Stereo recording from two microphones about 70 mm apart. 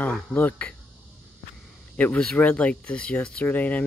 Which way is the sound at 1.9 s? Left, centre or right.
Left.